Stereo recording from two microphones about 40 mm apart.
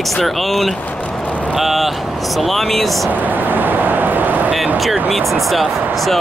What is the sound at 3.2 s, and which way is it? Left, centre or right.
Vehicle, right.